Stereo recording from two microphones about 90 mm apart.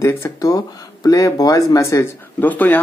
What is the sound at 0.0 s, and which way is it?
Speech, 35° left (ahead or behind).